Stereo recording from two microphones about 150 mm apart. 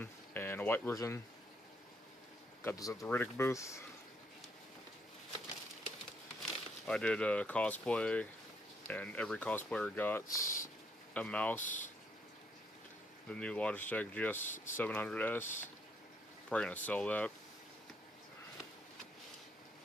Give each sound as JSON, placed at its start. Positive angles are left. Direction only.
{"t": 0.0, "sound": "speech", "side_deg": 15}
{"t": 2.6, "sound": "speech", "side_deg": 20}
{"t": 6.9, "sound": "speech", "side_deg": 5}
{"t": 11.6, "sound": "speech", "side_deg": 60}
{"t": 13.3, "sound": "speech", "side_deg": 5}